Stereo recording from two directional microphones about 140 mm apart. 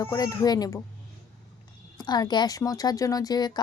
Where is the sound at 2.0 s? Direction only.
30° left (ahead or behind).